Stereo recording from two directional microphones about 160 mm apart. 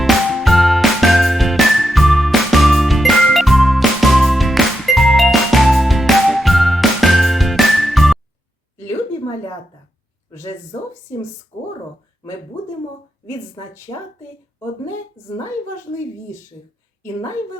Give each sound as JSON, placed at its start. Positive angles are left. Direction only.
{"t": 0.0, "sound": "music", "side_deg": 0}
{"t": 11.5, "sound": "speech", "side_deg": 20}
{"t": 17.0, "sound": "a woman's voice", "side_deg": 20}